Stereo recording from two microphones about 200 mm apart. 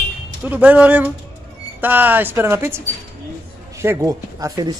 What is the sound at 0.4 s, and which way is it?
Speech, 10° right (ahead or behind).